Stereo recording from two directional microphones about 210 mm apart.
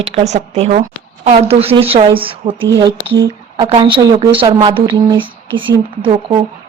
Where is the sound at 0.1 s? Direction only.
30° right (ahead or behind).